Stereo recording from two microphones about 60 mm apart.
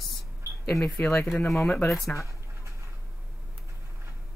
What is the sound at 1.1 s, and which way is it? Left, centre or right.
Speech, left.